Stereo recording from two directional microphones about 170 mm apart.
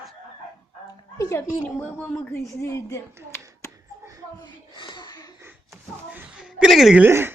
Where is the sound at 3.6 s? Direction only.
20° left (ahead or behind).